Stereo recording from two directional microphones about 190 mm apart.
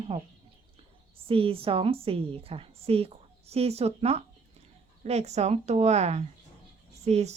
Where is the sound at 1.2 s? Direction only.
30° right (ahead or behind).